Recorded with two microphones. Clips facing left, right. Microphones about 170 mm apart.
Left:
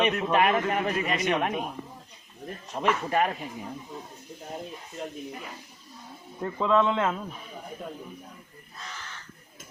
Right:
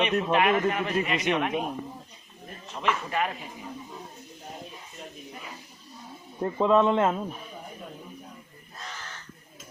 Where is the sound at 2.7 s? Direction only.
40° left (ahead or behind).